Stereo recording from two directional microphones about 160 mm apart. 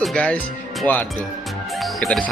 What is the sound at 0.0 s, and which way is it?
Music, 5° left (ahead or behind).